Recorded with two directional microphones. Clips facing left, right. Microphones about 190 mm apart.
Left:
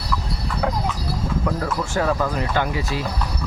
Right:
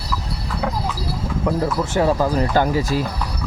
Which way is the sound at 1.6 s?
25° right (ahead or behind).